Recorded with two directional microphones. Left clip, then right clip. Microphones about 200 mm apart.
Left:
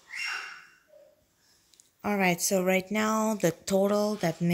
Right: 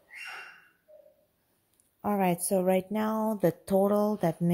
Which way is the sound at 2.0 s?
10° right (ahead or behind).